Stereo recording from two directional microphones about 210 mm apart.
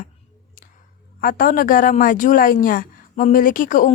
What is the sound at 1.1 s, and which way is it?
Speech, 45° left (ahead or behind).